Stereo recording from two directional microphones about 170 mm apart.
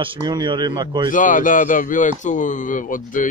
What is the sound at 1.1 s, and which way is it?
A man's voice, 50° left (ahead or behind).